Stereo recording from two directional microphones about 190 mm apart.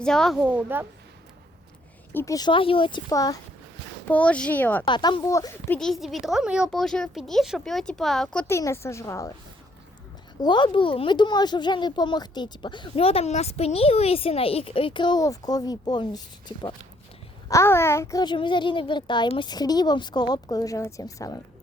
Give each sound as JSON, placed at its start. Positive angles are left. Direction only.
{"t": 0.0, "sound": "a woman's voice", "side_deg": 5}
{"t": 2.1, "sound": "speech", "side_deg": 15}
{"t": 4.1, "sound": "speech", "side_deg": 5}
{"t": 4.9, "sound": "a woman's voice", "side_deg": 25}
{"t": 10.4, "sound": "speech", "side_deg": 25}
{"t": 17.5, "sound": "speech", "side_deg": 15}